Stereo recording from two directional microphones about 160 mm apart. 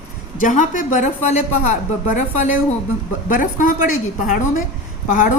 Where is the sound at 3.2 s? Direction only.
55° left (ahead or behind).